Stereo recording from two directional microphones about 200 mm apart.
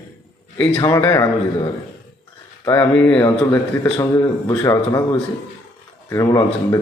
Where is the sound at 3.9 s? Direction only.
15° left (ahead or behind).